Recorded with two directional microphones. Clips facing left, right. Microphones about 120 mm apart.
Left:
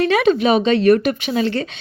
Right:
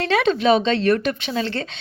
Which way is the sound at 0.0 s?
5° left (ahead or behind).